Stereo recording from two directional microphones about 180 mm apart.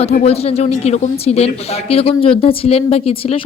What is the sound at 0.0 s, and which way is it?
A woman's voice, 35° left (ahead or behind).